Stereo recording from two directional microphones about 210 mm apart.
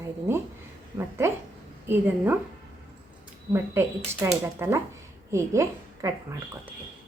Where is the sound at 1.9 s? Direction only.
10° right (ahead or behind).